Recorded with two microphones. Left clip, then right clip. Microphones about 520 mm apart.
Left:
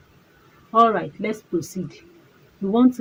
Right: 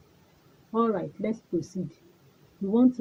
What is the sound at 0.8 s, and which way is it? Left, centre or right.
A woman's voice, right.